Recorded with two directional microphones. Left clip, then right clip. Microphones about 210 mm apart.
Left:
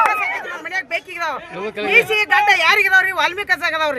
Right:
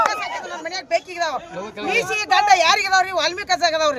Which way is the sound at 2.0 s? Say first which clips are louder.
Left 1 dB; 5° left (ahead or behind).